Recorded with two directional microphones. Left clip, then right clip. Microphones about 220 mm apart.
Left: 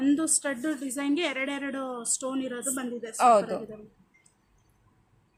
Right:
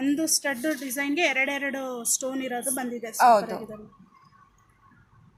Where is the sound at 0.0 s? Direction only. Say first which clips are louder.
Right 1 dB; 5° left (ahead or behind).